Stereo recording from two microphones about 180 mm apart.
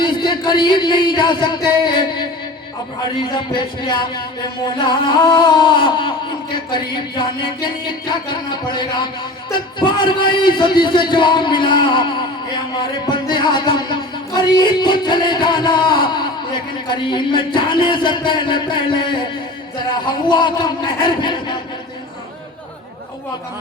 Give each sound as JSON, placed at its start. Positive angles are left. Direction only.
{"t": 0.0, "sound": "music", "side_deg": 25}